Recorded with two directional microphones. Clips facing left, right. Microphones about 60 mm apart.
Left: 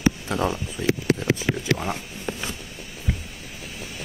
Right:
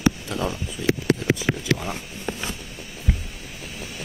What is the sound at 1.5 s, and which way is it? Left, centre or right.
Speech, centre.